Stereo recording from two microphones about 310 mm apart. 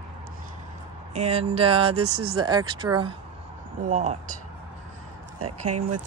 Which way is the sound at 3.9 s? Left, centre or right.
Right.